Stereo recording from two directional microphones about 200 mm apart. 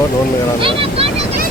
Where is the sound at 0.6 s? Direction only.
25° right (ahead or behind).